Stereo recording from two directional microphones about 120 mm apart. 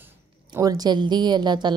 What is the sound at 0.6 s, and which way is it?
A woman's voice, 30° right (ahead or behind).